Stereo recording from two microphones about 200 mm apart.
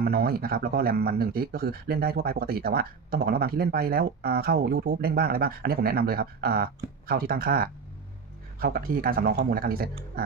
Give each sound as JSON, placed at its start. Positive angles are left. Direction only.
{"t": 0.0, "sound": "speech", "side_deg": -50}